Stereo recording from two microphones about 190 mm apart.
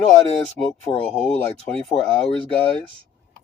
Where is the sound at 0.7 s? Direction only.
10° left (ahead or behind).